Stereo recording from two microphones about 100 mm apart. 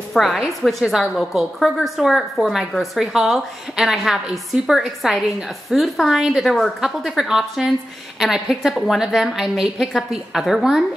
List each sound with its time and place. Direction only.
0.1 s a woman's voice: centre (ahead or behind)